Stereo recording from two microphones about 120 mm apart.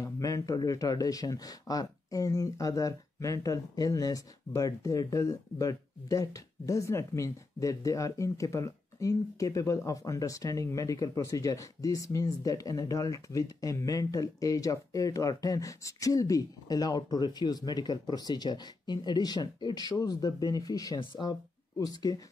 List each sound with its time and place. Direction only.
0.0 s speech: 30° left (ahead or behind)